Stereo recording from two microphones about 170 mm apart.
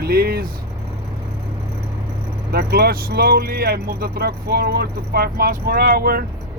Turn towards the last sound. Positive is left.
turn(degrees=-65)  # may be behind; listen again after turning